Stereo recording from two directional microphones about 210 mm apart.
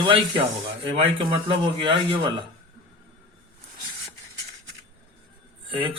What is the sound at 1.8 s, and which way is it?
Speech, 20° right (ahead or behind).